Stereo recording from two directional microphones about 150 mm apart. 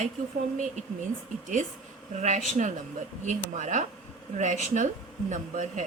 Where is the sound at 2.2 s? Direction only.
50° right (ahead or behind).